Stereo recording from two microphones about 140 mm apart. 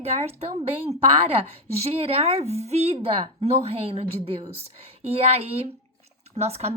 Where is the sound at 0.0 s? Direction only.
50° right (ahead or behind).